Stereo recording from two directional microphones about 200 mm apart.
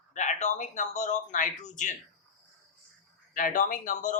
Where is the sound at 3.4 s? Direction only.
40° left (ahead or behind).